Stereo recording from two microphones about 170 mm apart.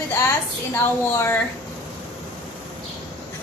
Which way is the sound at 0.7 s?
15° left (ahead or behind).